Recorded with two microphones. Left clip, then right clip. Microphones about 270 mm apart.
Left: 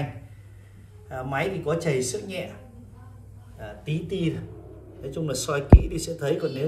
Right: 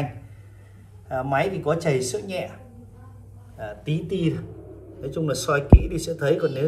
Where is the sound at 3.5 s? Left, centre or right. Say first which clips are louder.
Right 4 dB; centre.